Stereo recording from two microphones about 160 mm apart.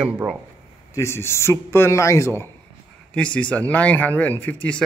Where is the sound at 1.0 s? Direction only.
15° left (ahead or behind).